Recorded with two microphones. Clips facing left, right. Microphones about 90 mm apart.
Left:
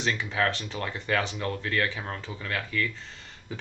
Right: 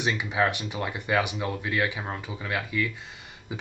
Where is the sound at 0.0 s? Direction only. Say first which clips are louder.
Right 2 dB; 15° right (ahead or behind).